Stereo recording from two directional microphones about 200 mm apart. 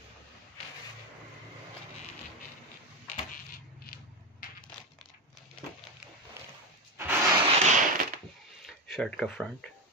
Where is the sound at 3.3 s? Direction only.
45° left (ahead or behind).